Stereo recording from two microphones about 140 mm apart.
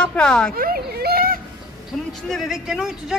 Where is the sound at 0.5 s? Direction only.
90° right.